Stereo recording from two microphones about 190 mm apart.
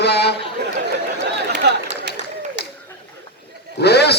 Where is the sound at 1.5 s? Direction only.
65° right (ahead or behind).